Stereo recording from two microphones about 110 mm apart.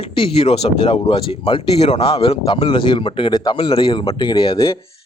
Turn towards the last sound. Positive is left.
turn(degrees=50)  # may be behind; listen again after turning